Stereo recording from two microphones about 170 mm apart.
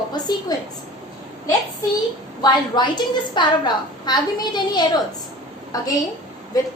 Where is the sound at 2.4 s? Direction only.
25° left (ahead or behind).